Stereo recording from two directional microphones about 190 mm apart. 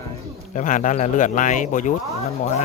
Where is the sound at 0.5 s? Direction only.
45° left (ahead or behind).